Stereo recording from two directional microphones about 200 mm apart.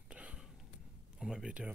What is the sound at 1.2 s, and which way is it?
Speech, 5° right (ahead or behind).